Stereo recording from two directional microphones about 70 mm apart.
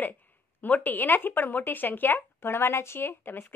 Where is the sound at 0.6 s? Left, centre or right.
Left.